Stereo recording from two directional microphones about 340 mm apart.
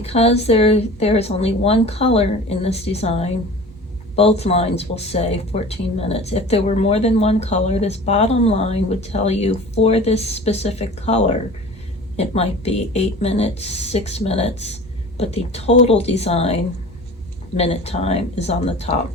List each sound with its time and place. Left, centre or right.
0.0 s speech: centre
17.6 s speech: centre